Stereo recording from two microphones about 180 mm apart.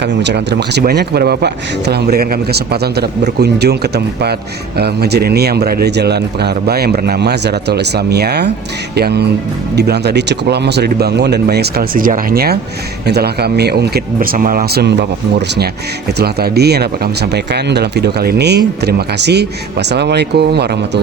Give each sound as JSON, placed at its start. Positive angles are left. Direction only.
{"t": 0.0, "sound": "a man's voice", "side_deg": -75}